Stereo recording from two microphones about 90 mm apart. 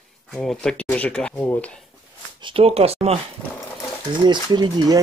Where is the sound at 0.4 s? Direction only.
5° left (ahead or behind); by 1.7 s 20° left (ahead or behind).